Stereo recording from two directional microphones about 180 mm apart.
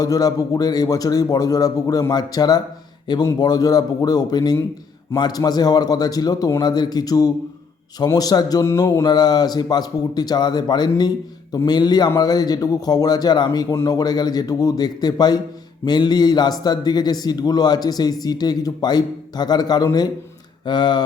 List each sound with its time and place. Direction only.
0.0 s a man's voice: 20° left (ahead or behind)